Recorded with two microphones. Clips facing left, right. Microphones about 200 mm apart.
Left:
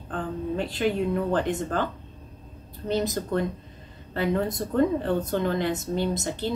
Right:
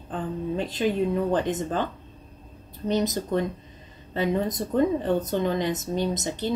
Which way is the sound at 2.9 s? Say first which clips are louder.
Right 1 dB; 15° right (ahead or behind).